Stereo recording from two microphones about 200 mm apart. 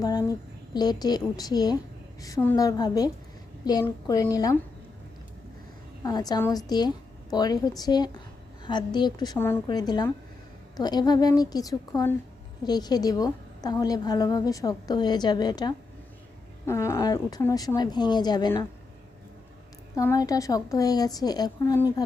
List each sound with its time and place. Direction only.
0.7 s a woman's voice: 20° left (ahead or behind)
6.0 s a woman's voice: 20° left (ahead or behind)
20.0 s a woman's voice: 15° left (ahead or behind)